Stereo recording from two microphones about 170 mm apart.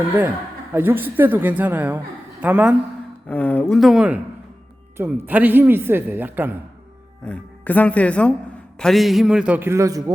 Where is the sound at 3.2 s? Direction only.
10° left (ahead or behind).